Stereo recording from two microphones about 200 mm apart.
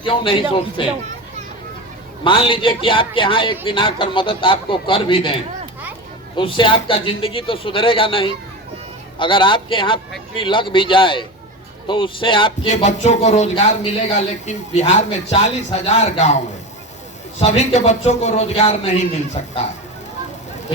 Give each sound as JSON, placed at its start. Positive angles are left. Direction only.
{"t": 0.0, "sound": "a man's voice", "side_deg": 25}
{"t": 2.2, "sound": "a man's voice", "side_deg": 25}
{"t": 17.4, "sound": "speech", "side_deg": 30}